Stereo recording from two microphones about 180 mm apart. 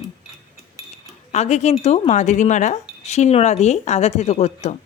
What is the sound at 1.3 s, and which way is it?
A woman's voice, 40° left (ahead or behind).